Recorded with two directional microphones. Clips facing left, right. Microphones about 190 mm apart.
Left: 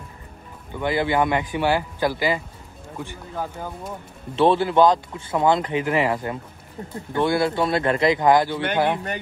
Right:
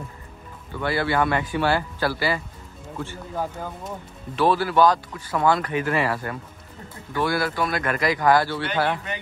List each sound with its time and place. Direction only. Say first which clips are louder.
0.7 s a man's voice: left 2 dB; 15° left (ahead or behind)
4.4 s a man's voice: left 2 dB; 25° left (ahead or behind)